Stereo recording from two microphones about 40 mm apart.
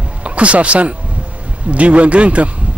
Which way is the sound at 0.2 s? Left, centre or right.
Right.